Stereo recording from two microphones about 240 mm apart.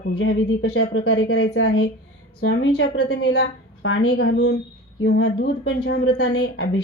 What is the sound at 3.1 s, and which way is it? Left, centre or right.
A woman's voice, left.